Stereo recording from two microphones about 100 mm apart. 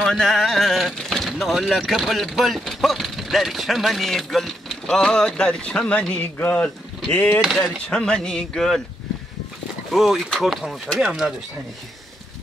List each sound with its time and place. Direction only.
0.0 s speech: centre (ahead or behind)
7.4 s speech: 5° right (ahead or behind)
7.8 s speech: 10° left (ahead or behind)
9.9 s speech: centre (ahead or behind)